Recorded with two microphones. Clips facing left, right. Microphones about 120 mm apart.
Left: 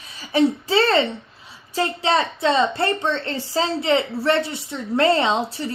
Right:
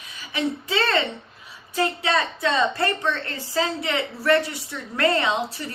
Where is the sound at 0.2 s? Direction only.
30° left (ahead or behind).